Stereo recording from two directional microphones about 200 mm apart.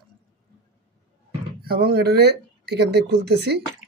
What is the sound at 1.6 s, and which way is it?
Speech, 50° right (ahead or behind).